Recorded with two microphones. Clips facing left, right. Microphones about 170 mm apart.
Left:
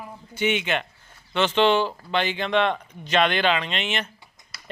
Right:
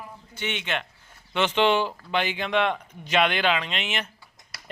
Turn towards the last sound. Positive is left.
turn(degrees=-5)  # may be behind; listen again after turning